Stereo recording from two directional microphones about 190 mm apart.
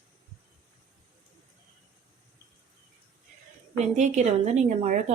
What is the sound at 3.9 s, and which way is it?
A woman's voice, 40° right (ahead or behind).